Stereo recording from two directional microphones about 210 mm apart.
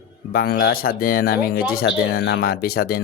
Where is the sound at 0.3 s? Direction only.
45° left (ahead or behind).